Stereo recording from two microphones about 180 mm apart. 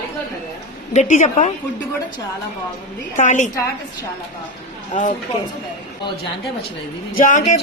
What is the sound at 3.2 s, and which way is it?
Speech, 45° left (ahead or behind).